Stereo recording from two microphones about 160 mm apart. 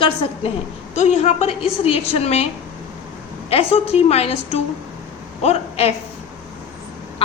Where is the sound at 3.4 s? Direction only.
40° left (ahead or behind).